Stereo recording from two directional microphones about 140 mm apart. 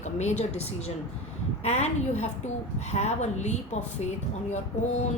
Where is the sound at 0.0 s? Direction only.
55° left (ahead or behind).